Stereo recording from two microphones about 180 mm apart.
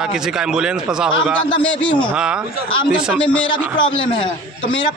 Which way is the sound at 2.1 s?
5° right (ahead or behind).